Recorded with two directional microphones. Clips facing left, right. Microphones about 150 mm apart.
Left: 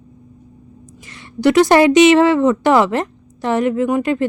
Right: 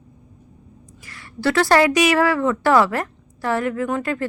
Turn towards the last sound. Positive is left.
turn(degrees=15)  # may be behind; listen again after turning